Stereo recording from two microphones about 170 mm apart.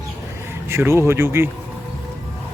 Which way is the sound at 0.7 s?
15° right (ahead or behind).